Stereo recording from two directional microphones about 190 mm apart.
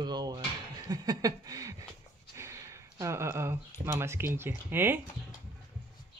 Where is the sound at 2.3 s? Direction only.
15° right (ahead or behind).